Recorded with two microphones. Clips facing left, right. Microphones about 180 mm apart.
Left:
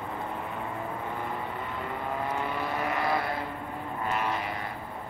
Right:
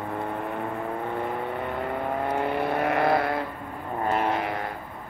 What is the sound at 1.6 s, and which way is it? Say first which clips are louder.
Vehicle: right 5 dB; 60° right (ahead or behind).